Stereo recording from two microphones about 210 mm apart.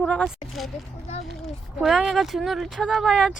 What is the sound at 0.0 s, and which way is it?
Speech, 5° left (ahead or behind).